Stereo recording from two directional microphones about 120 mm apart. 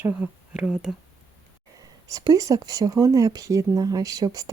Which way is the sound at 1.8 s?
30° right (ahead or behind).